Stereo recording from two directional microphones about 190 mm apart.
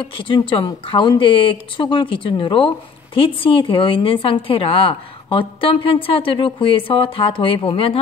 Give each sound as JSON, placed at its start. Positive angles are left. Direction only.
{"t": 0.0, "sound": "a woman's voice", "side_deg": 25}